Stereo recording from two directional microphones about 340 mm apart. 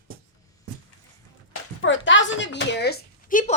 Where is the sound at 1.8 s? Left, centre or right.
Left.